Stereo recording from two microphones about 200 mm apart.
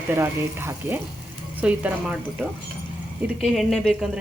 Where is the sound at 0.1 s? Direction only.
10° right (ahead or behind).